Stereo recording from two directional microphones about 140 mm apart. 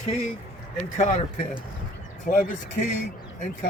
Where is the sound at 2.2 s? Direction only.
85° left.